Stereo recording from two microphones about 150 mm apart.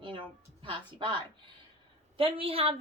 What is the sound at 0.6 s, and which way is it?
A woman's voice, 35° right (ahead or behind).